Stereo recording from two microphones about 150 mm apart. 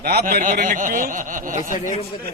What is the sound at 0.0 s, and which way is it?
Speech, 90° right.